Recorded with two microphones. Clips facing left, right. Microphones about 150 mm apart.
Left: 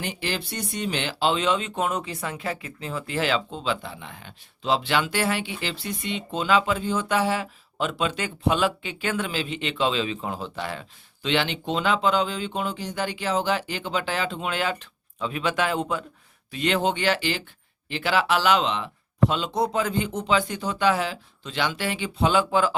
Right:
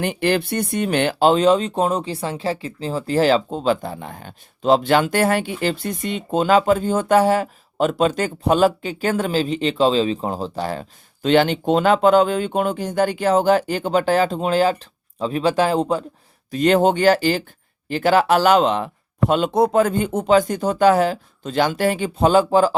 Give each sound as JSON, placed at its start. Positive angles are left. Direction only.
{"t": 0.0, "sound": "speech", "side_deg": -55}